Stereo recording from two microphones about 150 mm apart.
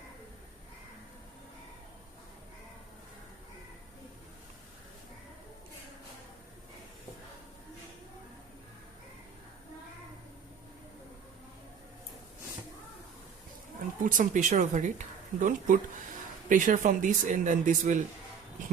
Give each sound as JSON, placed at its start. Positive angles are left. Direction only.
{"t": 14.0, "sound": "a woman's voice", "side_deg": -60}